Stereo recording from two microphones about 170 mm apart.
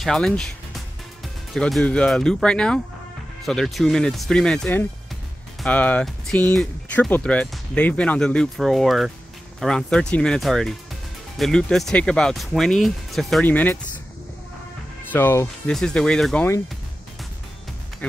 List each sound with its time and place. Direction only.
0.0 s speech: 5° left (ahead or behind)
15.1 s speech: 10° left (ahead or behind)